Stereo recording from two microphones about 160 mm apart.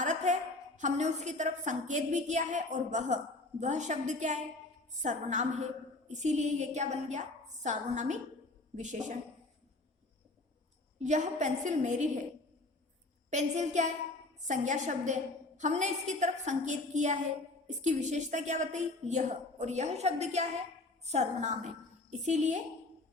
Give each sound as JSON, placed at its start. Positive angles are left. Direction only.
{"t": 0.0, "sound": "a sound", "side_deg": -50}
{"t": 0.8, "sound": "a woman's voice", "side_deg": -50}
{"t": 11.0, "sound": "a woman's voice", "side_deg": -50}
{"t": 13.3, "sound": "a woman's voice", "side_deg": -45}